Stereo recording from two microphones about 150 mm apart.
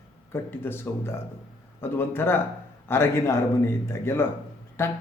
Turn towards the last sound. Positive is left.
turn(degrees=20)  # may be behind; listen again after turning